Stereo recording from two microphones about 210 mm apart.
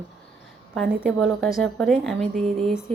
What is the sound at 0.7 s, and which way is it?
A woman's voice, centre (ahead or behind).